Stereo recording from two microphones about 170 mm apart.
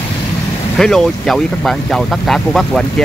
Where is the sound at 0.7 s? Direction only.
Centre (ahead or behind).